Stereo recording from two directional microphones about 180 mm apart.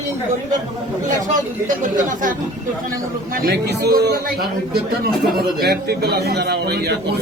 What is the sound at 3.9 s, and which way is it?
Speech, 55° right (ahead or behind).